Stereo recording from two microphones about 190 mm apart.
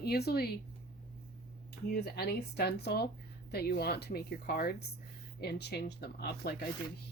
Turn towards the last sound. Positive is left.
turn(degrees=55)  # may be behind; listen again after turning